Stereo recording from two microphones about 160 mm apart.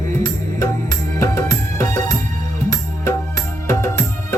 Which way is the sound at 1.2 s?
15° left (ahead or behind).